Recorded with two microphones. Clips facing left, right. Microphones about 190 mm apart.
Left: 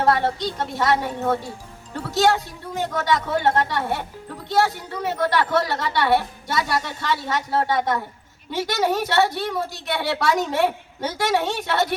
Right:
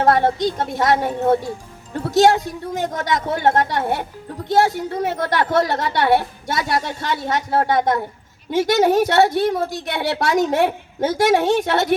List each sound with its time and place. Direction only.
0.0 s a woman's voice: 45° right (ahead or behind)